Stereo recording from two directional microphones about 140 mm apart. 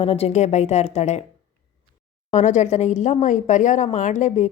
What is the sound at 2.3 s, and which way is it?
A woman's voice, 60° left (ahead or behind).